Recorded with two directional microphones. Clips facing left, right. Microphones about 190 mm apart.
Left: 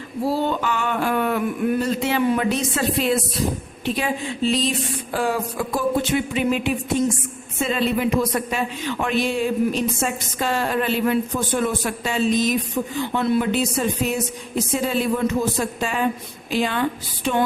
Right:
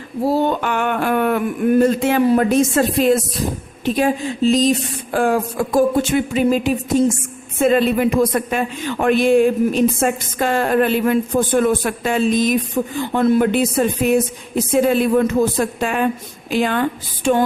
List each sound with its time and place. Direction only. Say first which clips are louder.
0.3 s a man's voice: right 4 dB; 55° right (ahead or behind); by 7.2 s 40° right (ahead or behind)
7.6 s a man's voice: right 6 dB; 55° right (ahead or behind)